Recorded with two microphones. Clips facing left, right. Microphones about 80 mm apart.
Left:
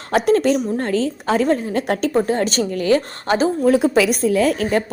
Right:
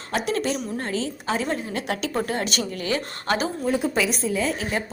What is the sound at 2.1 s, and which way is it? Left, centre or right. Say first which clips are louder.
A woman's voice: left 8 dB; left.